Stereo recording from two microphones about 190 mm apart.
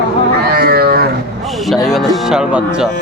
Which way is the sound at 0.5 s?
55° right (ahead or behind).